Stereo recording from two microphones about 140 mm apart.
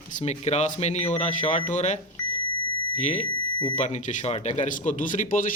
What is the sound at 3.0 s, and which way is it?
Speech, 55° left (ahead or behind).